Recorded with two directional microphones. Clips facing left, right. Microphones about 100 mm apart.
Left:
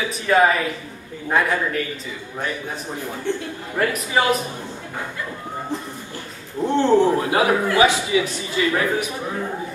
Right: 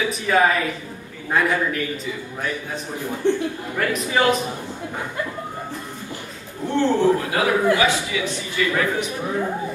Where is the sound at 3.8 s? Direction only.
20° left (ahead or behind).